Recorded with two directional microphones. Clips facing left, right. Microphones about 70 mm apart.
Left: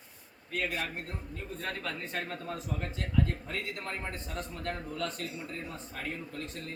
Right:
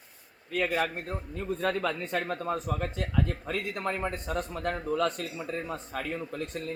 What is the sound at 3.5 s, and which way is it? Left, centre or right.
A man's voice, right.